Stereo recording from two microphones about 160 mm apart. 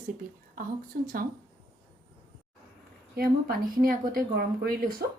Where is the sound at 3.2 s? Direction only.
70° right (ahead or behind).